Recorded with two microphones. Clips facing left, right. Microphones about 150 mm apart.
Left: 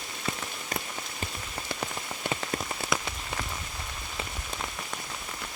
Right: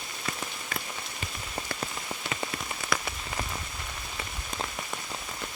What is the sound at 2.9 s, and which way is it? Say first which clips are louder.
Rain on surface: even; 20° left (ahead or behind).